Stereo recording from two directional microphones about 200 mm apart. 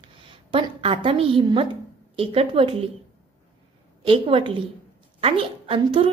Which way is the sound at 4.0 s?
25° right (ahead or behind).